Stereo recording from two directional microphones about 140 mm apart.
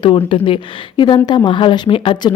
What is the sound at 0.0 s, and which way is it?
Speech, 35° left (ahead or behind).